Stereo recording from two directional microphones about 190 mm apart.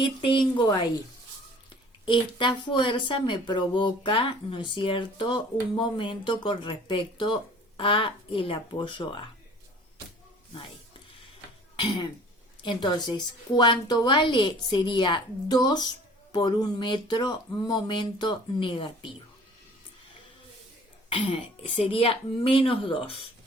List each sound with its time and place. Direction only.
0.0 s speech: 25° left (ahead or behind)
2.0 s speech: 25° left (ahead or behind)
11.8 s speech: 25° left (ahead or behind)
21.1 s speech: 30° left (ahead or behind)